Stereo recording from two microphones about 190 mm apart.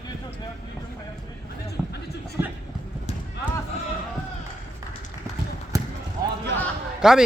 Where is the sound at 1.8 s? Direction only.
Centre (ahead or behind).